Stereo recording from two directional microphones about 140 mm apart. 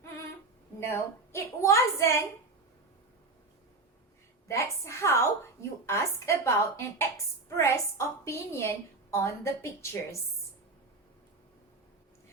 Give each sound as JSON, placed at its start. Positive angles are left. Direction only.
{"t": 0.8, "sound": "a woman's voice", "side_deg": 15}
{"t": 4.4, "sound": "a woman's voice", "side_deg": 20}